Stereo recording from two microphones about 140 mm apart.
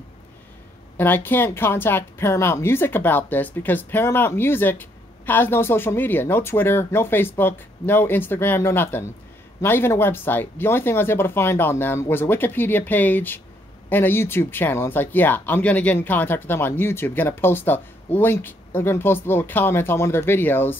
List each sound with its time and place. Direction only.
0.9 s speech: 15° left (ahead or behind)